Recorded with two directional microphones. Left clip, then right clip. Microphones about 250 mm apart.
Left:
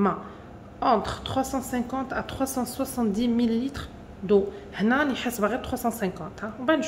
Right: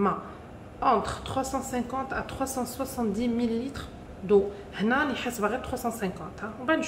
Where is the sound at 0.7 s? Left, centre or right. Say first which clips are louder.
Left 1 dB; left.